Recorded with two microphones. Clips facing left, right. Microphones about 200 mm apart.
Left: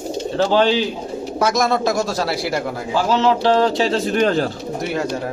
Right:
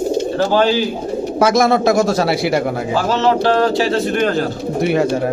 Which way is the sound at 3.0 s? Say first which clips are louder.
Right 1 dB; 50° right (ahead or behind).